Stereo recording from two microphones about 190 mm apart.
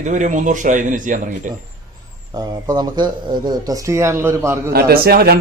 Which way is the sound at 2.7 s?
20° right (ahead or behind).